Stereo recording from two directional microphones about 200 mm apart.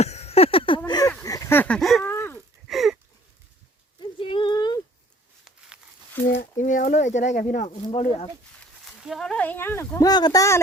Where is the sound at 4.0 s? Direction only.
25° left (ahead or behind).